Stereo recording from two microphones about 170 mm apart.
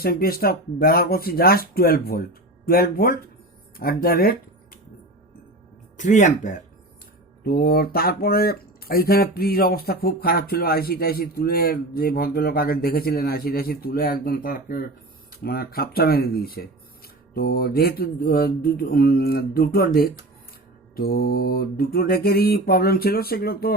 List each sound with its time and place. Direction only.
0.0 s speech: 60° left (ahead or behind)
6.0 s speech: 45° left (ahead or behind)
7.4 s speech: 65° left (ahead or behind)